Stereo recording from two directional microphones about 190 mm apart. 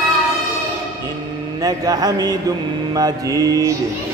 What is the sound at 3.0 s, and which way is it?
Mantra, 20° right (ahead or behind).